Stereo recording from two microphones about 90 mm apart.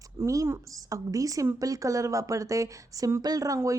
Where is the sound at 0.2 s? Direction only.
30° right (ahead or behind).